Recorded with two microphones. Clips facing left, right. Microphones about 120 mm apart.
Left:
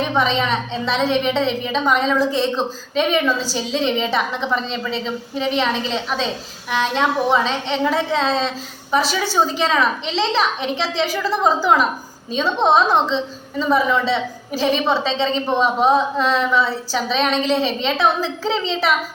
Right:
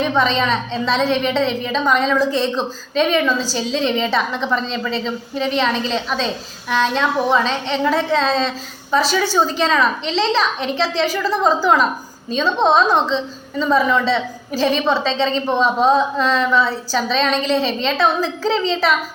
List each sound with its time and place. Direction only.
0.0 s a woman's voice: 15° left (ahead or behind)